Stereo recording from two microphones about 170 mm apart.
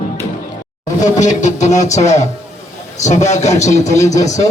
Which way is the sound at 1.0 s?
45° left (ahead or behind).